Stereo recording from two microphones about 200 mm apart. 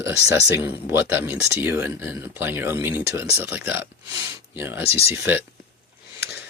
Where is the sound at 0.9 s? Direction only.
10° right (ahead or behind).